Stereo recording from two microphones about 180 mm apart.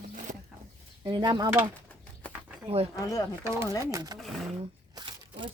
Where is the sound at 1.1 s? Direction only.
25° right (ahead or behind).